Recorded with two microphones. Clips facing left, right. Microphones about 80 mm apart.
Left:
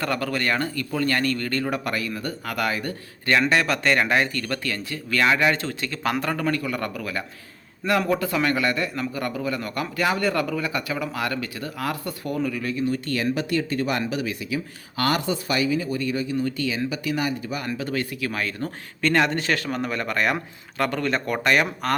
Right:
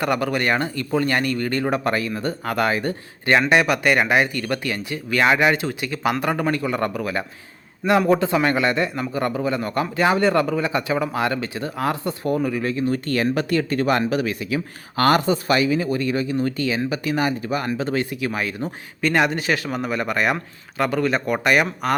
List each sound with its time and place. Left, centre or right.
0.0 s a man's voice: centre
3.5 s speech: centre
6.3 s a man's voice: right
12.9 s speech: right
17.7 s speech: right; by 21.9 s centre